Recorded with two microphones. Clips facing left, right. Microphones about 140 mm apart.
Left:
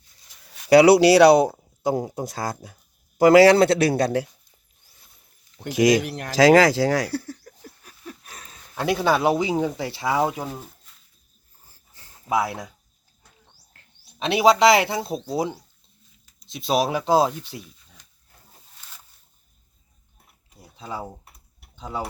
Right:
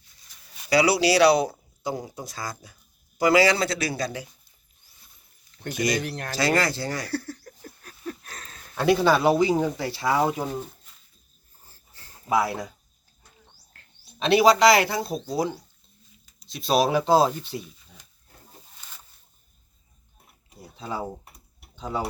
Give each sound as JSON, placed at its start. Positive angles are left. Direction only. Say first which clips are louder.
{"t": 0.7, "sound": "speech", "louder": "left 8 dB", "side_deg": 65}
{"t": 1.3, "sound": "speech", "louder": "left 5 dB", "side_deg": 50}
{"t": 5.6, "sound": "speech", "louder": "left 8 dB", "side_deg": 90}
{"t": 6.0, "sound": "speech", "louder": "left 2 dB", "side_deg": 10}
{"t": 6.3, "sound": "speech", "louder": "left 10 dB", "side_deg": 90}
{"t": 7.1, "sound": "a sound", "louder": "left 1 dB", "side_deg": 10}
{"t": 10.2, "sound": "speech", "louder": "right 1 dB", "side_deg": 5}
{"t": 11.9, "sound": "a sound", "louder": "even", "side_deg": 15}
{"t": 13.7, "sound": "speech", "louder": "left 1 dB", "side_deg": 15}
{"t": 20.7, "sound": "speech", "louder": "right 2 dB", "side_deg": 15}